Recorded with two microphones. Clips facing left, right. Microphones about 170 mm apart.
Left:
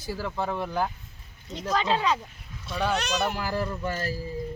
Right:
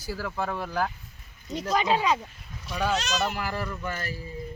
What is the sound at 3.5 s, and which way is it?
Speech, 30° left (ahead or behind).